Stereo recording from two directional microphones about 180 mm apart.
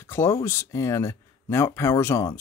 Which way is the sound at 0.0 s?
15° left (ahead or behind).